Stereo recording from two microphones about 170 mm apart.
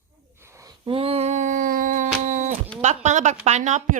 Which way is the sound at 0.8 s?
35° right (ahead or behind).